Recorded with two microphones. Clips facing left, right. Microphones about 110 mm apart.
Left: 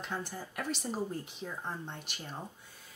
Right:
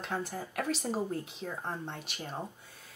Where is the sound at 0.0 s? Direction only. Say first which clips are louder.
Right 3 dB; centre (ahead or behind).